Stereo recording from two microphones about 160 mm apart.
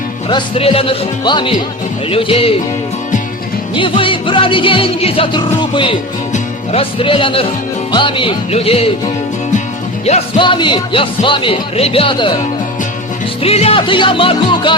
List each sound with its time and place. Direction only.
0.3 s speech: 35° left (ahead or behind)
3.8 s speech: 30° left (ahead or behind)
6.3 s music: 35° left (ahead or behind)
7.9 s speech: 30° left (ahead or behind)
10.1 s speech: 40° left (ahead or behind)
10.4 s speech: 30° left (ahead or behind)
13.4 s speech: 40° left (ahead or behind)